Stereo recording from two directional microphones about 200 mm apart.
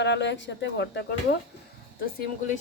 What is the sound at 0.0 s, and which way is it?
Speech, 60° left (ahead or behind).